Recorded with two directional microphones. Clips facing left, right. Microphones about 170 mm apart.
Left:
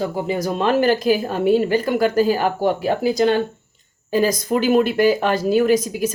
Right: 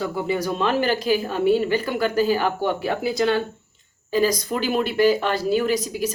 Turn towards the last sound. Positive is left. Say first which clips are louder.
# left 5 dB
turn(degrees=50)  # may be behind; listen again after turning